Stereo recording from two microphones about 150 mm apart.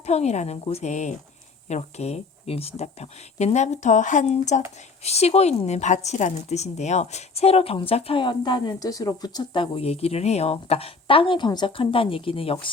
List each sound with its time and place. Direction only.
0.0 s a woman's voice: 45° left (ahead or behind)